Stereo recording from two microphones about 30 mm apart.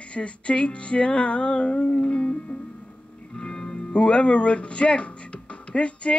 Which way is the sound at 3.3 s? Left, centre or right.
Left.